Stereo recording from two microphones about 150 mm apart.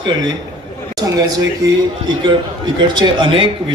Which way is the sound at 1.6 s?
20° right (ahead or behind).